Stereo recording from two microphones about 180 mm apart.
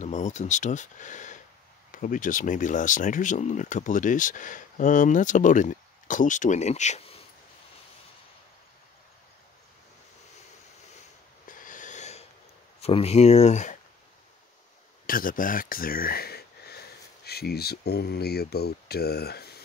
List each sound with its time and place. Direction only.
0.0 s speech: 40° left (ahead or behind)
11.4 s a sound: 50° left (ahead or behind)
12.8 s speech: 35° left (ahead or behind)
15.0 s speech: 50° left (ahead or behind)